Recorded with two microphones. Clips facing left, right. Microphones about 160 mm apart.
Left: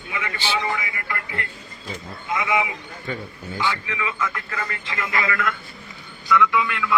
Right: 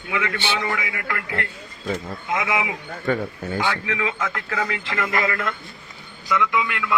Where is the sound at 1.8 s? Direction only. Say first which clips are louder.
Right 4 dB; 75° right (ahead or behind); by 2.6 s 90° right.